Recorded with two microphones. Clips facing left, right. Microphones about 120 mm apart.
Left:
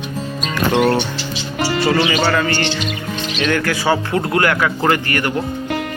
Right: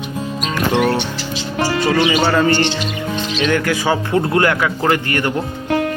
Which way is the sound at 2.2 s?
25° right (ahead or behind).